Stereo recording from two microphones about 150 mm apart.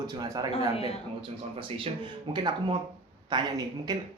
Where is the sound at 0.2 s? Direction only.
25° right (ahead or behind).